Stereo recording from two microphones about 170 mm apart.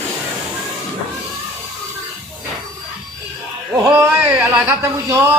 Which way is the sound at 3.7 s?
15° right (ahead or behind).